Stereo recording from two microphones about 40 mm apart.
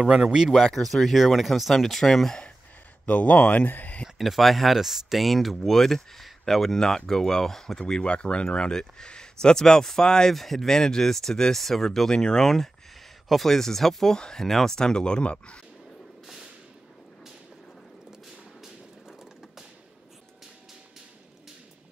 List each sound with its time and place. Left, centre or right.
0.0 s speech: right
0.5 s speech: centre
3.1 s speech: left
4.2 s speech: centre
7.8 s speech: left
10.3 s speech: centre
14.1 s speech: centre
14.8 s speech: centre
18.6 s vehicle: centre